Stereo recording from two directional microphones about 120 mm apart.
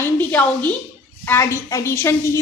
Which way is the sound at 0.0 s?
15° left (ahead or behind).